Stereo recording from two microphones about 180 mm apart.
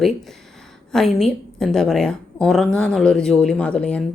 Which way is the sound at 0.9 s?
Centre (ahead or behind).